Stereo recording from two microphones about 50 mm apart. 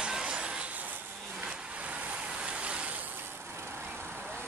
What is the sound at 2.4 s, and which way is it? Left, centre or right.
Ratchet, right.